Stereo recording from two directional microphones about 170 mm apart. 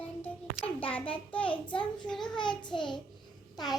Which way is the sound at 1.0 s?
30° left (ahead or behind).